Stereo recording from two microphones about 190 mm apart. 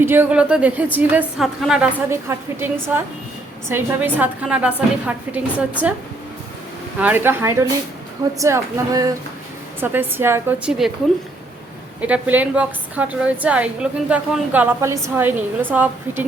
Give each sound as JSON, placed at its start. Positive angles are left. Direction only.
{"t": 0.0, "sound": "a woman's voice", "side_deg": -10}
{"t": 2.0, "sound": "a woman's voice", "side_deg": -15}
{"t": 7.0, "sound": "a woman's voice", "side_deg": -10}
{"t": 11.9, "sound": "a woman's voice", "side_deg": -5}